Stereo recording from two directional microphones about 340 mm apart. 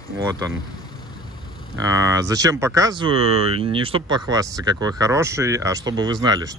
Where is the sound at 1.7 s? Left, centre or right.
Centre.